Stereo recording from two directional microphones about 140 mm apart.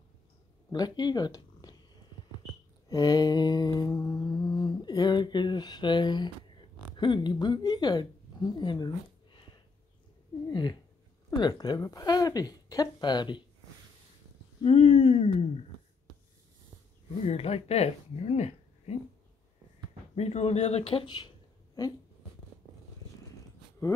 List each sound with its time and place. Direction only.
0.7 s speech: 30° left (ahead or behind)
2.9 s mantra: 25° left (ahead or behind)
7.0 s speech: 35° left (ahead or behind)
10.5 s a sound: 30° left (ahead or behind)
11.2 s speech: 30° left (ahead or behind)
14.6 s speech: 50° left (ahead or behind)
17.2 s speech: 45° left (ahead or behind)
20.2 s speech: 50° left (ahead or behind)